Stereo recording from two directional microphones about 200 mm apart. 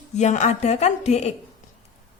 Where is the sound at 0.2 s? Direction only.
35° left (ahead or behind).